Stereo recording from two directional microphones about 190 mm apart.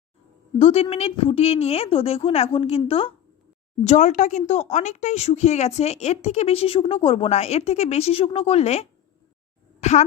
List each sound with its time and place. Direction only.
0.6 s a woman's voice: 30° left (ahead or behind)
3.8 s a woman's voice: 40° left (ahead or behind)